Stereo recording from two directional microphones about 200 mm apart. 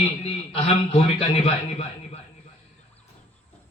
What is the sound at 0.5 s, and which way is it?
Speech, 30° left (ahead or behind).